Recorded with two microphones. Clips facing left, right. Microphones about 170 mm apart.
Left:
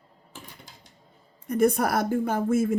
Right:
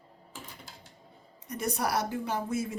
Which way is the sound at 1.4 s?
55° left (ahead or behind).